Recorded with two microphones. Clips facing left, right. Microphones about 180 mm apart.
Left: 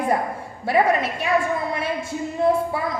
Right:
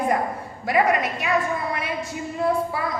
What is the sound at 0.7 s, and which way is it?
Speech, 30° left (ahead or behind).